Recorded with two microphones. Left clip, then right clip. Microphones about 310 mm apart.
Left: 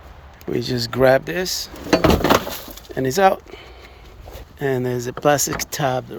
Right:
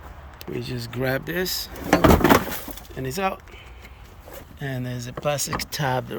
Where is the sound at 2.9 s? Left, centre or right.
Centre.